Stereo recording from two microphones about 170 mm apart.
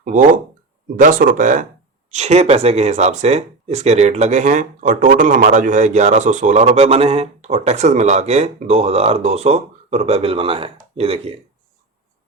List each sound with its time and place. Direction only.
0.0 s speech: 50° right (ahead or behind)